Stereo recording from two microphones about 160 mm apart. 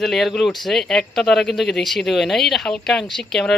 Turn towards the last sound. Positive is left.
turn(degrees=5)  # may be behind; listen again after turning